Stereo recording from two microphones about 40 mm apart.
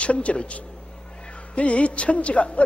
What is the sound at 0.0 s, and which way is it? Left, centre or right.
A man's voice, left.